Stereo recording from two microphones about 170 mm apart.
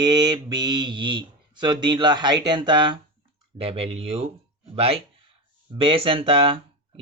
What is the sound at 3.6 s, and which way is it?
Speech, 35° right (ahead or behind).